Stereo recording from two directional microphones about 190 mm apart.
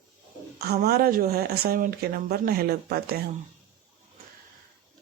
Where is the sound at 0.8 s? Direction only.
55° right (ahead or behind).